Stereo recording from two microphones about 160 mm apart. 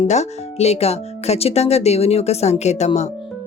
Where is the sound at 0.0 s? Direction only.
45° left (ahead or behind).